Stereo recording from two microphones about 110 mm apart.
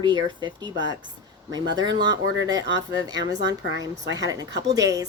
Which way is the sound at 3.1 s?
35° right (ahead or behind).